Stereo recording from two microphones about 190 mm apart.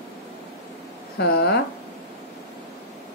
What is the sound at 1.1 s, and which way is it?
Speech, 60° left (ahead or behind).